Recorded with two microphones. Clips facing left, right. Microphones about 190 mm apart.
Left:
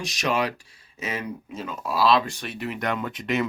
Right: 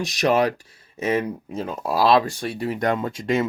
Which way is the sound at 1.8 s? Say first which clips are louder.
Right 3 dB; 40° right (ahead or behind).